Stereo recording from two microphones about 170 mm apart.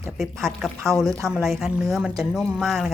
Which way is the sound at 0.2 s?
Centre (ahead or behind).